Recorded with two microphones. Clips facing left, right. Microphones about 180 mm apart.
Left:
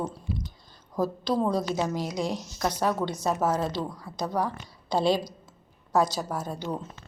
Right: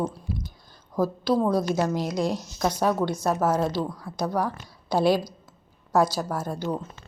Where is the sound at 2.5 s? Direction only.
10° right (ahead or behind).